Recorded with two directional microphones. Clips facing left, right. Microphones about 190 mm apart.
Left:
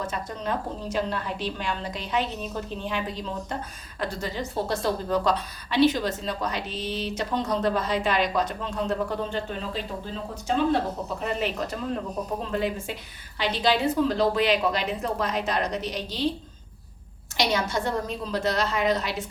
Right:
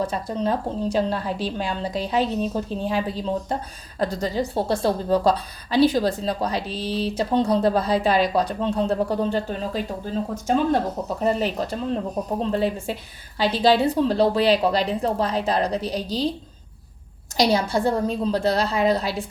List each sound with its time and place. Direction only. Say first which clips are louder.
0.0 s a woman's voice: right 7 dB; 35° right (ahead or behind)
11.2 s a woman's voice: right 7 dB; 35° right (ahead or behind)
17.3 s a woman's voice: right 5 dB; 35° right (ahead or behind)